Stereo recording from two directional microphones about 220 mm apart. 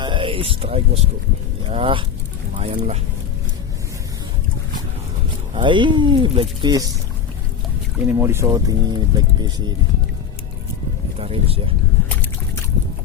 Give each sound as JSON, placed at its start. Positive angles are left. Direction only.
{"t": 0.0, "sound": "speech", "side_deg": -25}
{"t": 5.5, "sound": "speech", "side_deg": -20}
{"t": 7.9, "sound": "speech", "side_deg": -10}
{"t": 11.2, "sound": "speech", "side_deg": -25}